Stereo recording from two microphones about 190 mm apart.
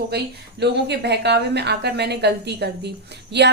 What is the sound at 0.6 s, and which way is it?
A woman's voice, 65° right (ahead or behind).